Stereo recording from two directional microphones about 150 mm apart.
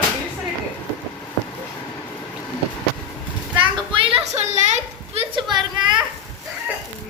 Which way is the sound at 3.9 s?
35° right (ahead or behind).